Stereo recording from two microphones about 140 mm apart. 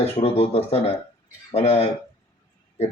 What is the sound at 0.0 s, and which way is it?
Speech, 45° left (ahead or behind).